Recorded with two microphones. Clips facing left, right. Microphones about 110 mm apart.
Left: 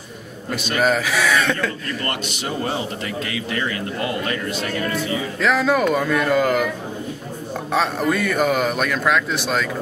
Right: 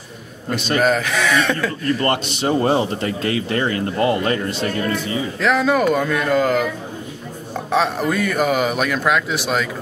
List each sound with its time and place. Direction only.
0.7 s a man's voice: centre (ahead or behind)
2.0 s speech: 35° right (ahead or behind)
4.9 s a man's voice: centre (ahead or behind)
7.7 s a man's voice: centre (ahead or behind)